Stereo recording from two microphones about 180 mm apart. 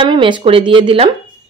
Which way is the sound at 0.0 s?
25° right (ahead or behind).